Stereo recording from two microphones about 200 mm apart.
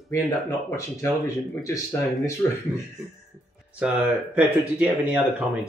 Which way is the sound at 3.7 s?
5° right (ahead or behind).